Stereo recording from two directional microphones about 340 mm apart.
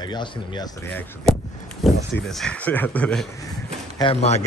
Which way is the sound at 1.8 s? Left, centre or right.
Centre.